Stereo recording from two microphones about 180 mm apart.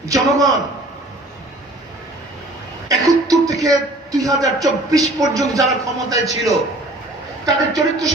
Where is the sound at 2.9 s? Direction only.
20° right (ahead or behind).